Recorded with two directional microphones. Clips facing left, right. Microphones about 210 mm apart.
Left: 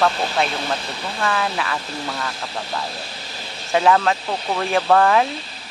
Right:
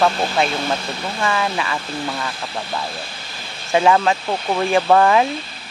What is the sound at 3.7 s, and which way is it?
Speech, centre (ahead or behind).